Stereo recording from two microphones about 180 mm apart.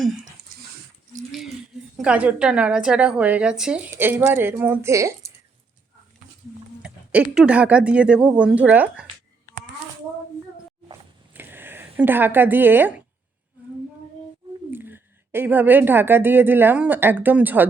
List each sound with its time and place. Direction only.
2.0 s a woman's voice: 5° right (ahead or behind)
6.8 s speech: 5° right (ahead or behind)
11.3 s a sound: 10° right (ahead or behind)
14.7 s a woman's voice: 10° right (ahead or behind)